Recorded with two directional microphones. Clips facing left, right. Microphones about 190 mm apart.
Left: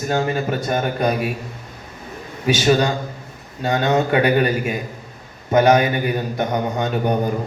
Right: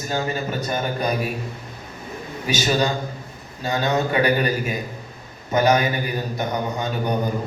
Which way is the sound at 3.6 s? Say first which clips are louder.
Left 4 dB; 50° left (ahead or behind).